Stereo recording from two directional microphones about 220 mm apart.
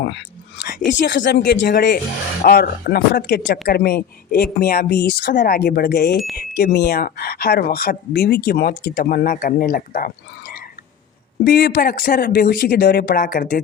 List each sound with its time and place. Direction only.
0.0 s a sound: 50° left (ahead or behind)
0.9 s speech: 55° left (ahead or behind)
11.4 s speech: 50° left (ahead or behind)